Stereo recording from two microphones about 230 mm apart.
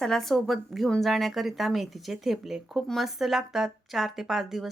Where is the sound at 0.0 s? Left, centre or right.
Centre.